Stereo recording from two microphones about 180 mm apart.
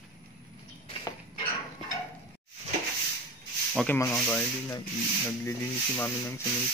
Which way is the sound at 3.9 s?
10° left (ahead or behind).